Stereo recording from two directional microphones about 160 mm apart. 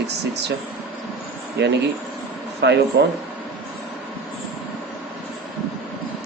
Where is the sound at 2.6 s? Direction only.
90° right.